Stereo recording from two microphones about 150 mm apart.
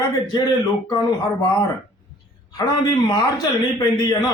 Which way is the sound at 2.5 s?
25° left (ahead or behind).